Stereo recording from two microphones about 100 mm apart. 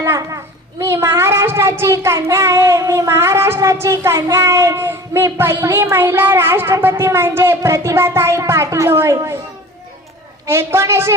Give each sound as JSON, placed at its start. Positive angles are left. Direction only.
{"t": 0.0, "sound": "a sound", "side_deg": -30}
{"t": 0.8, "sound": "speech", "side_deg": -30}
{"t": 10.4, "sound": "speech", "side_deg": -25}